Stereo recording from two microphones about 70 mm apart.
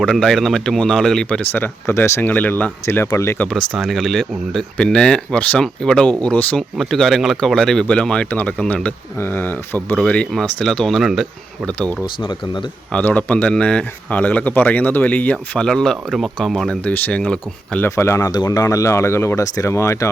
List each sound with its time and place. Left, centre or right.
0.0 s speech: centre
1.9 s speech: left
2.3 s speech: left
2.9 s speech: left
3.8 s speech: centre
9.1 s speech: left
10.6 s speech: centre
11.6 s speech: centre
15.5 s speech: centre
16.8 s speech: centre
17.8 s speech: left
18.2 s speech: left